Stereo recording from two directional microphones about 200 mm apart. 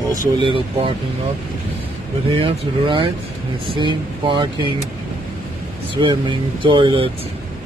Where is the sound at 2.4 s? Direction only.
25° right (ahead or behind).